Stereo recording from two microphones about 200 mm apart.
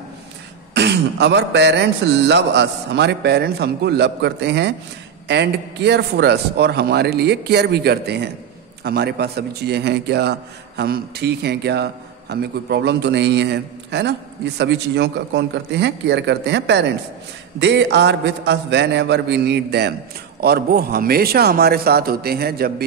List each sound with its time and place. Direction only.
0.7 s a man's voice: 60° right (ahead or behind)